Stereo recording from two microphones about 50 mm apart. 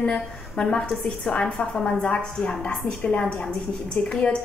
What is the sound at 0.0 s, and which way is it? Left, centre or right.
A woman's voice, centre.